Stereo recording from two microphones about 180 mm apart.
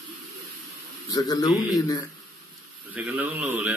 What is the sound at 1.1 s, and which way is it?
Speech, 20° left (ahead or behind).